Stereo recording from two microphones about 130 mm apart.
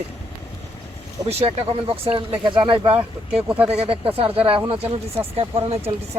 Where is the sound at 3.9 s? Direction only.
45° right (ahead or behind).